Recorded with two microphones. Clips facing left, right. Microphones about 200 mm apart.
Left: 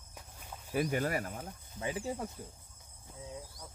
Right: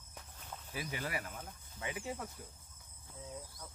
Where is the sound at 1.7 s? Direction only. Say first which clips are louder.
Left 5 dB; 30° left (ahead or behind).